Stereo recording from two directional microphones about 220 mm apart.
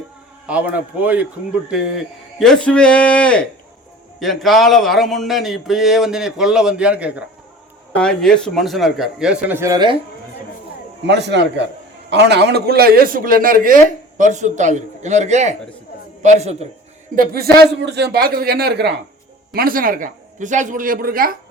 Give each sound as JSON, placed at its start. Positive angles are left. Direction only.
{"t": 0.4, "sound": "speech", "side_deg": -5}
{"t": 11.0, "sound": "a man's voice", "side_deg": -50}
{"t": 17.2, "sound": "a man's voice", "side_deg": -45}